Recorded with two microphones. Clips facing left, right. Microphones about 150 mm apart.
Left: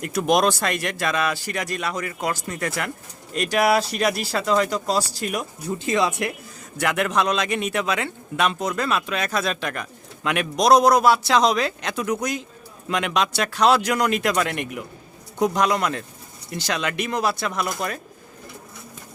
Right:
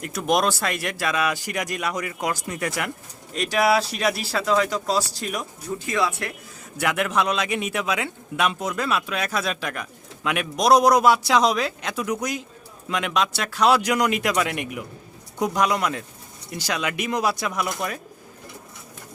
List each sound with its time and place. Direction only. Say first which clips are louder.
0.0 s a man's voice: left 3 dB; centre (ahead or behind)
3.3 s speech: left 1 dB; centre (ahead or behind)
5.8 s speech: left 3 dB; 20° left (ahead or behind)
6.7 s a man's voice: left 1 dB; 5° right (ahead or behind)